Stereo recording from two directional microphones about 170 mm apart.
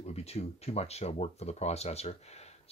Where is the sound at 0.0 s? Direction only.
40° left (ahead or behind).